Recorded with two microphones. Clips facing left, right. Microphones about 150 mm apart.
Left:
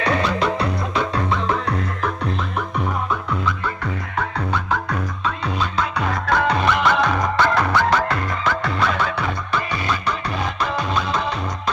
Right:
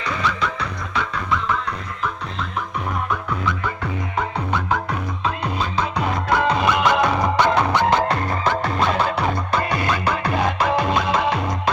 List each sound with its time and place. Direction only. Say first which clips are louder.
0.0 s music: left 5 dB; 70° left (ahead or behind)
4.2 s music: even; 10° right (ahead or behind)
6.2 s music: even; 10° right (ahead or behind)
8.1 s music: right 2 dB; 30° right (ahead or behind)
9.6 s music: right 1 dB; 55° right (ahead or behind)